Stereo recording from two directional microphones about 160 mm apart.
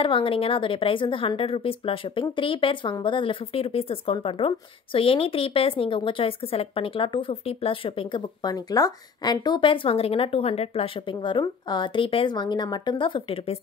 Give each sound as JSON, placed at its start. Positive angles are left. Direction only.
{"t": 0.0, "sound": "a woman's voice", "side_deg": 35}